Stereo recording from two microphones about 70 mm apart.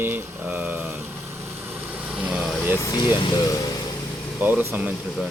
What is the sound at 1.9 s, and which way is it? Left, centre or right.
Vehicle, centre.